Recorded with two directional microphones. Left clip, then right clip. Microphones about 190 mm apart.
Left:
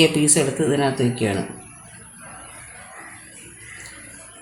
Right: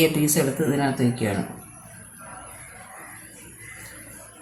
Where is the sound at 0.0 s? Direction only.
30° left (ahead or behind).